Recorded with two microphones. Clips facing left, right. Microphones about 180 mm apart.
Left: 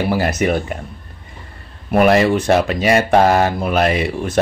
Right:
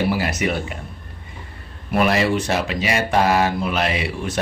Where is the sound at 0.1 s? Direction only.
45° left (ahead or behind).